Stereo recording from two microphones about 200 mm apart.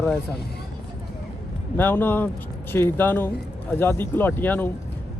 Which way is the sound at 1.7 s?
10° left (ahead or behind).